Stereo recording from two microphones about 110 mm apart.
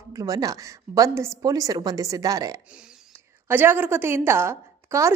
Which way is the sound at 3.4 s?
20° right (ahead or behind).